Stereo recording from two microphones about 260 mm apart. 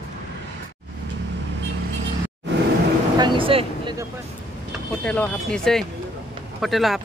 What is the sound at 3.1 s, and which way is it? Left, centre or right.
Speech, centre.